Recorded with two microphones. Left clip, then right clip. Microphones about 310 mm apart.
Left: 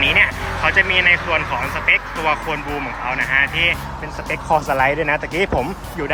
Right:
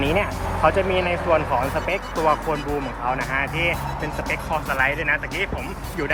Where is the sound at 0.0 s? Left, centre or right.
Centre.